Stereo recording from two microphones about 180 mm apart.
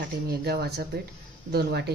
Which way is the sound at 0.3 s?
60° right (ahead or behind).